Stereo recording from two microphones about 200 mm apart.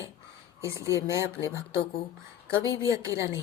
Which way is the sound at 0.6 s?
15° right (ahead or behind).